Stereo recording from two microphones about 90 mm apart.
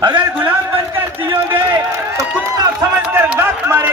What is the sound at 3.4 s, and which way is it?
Speech, 25° right (ahead or behind).